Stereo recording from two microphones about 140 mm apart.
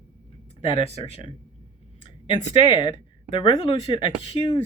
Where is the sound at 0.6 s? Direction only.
45° left (ahead or behind).